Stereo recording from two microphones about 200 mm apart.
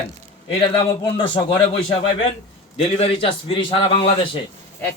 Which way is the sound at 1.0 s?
25° left (ahead or behind).